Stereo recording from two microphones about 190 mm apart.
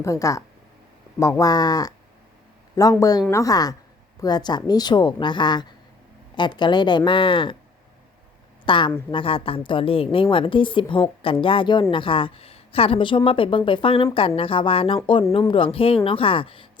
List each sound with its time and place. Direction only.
0.0 s a woman's voice: 15° left (ahead or behind)
8.6 s a woman's voice: 25° left (ahead or behind)